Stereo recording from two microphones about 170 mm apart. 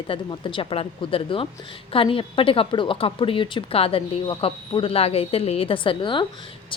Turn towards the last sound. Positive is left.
turn(degrees=30)  # may be behind; listen again after turning